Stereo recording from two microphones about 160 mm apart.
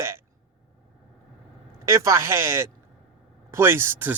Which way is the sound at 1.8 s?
20° right (ahead or behind).